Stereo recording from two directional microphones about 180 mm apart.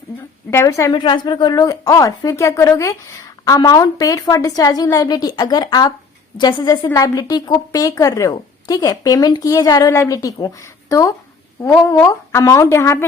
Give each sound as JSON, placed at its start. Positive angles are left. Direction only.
{"t": 0.5, "sound": "a woman's voice", "side_deg": 15}